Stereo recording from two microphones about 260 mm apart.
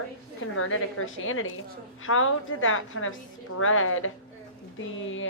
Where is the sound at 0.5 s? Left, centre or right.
Left.